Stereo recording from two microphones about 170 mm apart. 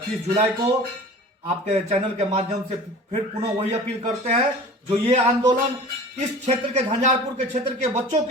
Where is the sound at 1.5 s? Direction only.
40° right (ahead or behind).